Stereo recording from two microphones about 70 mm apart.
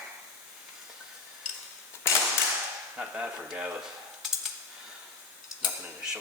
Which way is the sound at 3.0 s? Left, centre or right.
Centre.